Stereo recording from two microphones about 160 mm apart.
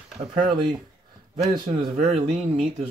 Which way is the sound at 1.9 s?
50° right (ahead or behind).